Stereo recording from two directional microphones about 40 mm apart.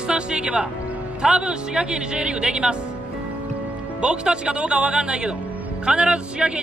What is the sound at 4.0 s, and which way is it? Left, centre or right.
A man's voice, right.